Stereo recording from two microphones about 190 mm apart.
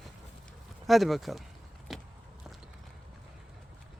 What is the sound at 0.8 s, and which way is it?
Speech, centre (ahead or behind).